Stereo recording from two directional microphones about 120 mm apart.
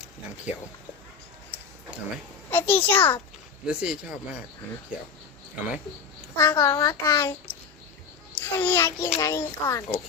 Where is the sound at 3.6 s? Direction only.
10° right (ahead or behind).